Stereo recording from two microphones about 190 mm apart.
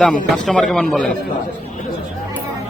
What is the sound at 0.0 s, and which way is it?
Speech, 5° left (ahead or behind).